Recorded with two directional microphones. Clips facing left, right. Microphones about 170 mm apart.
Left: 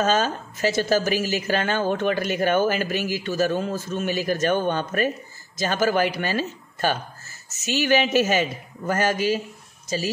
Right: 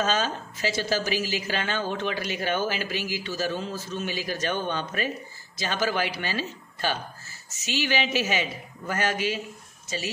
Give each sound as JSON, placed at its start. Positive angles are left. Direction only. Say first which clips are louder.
{"t": 0.0, "sound": "a woman's voice", "louder": "left 4 dB", "side_deg": 50}